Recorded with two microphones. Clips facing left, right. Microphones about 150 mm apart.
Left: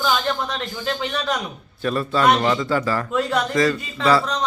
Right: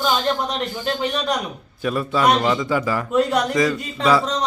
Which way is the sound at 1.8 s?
10° right (ahead or behind).